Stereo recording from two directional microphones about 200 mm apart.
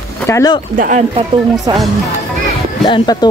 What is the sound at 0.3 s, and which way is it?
Speech, 15° left (ahead or behind).